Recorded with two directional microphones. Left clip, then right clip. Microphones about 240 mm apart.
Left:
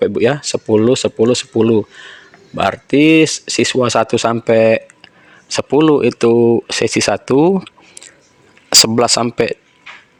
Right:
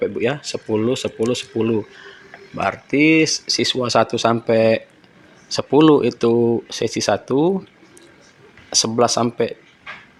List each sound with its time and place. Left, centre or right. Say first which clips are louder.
0.0 s speech: left 7 dB; left